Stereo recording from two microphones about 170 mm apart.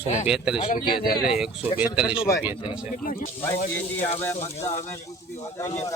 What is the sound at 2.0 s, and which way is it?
Speech, 5° right (ahead or behind).